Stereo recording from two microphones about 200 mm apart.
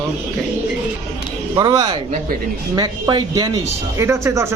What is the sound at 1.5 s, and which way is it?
A man's voice, 20° right (ahead or behind).